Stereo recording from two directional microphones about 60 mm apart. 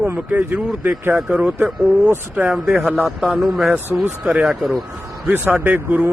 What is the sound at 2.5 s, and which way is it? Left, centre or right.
Speech, centre.